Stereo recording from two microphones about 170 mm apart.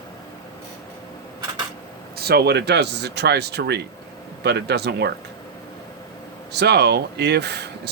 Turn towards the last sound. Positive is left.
turn(degrees=-75)  # may be behind; listen again after turning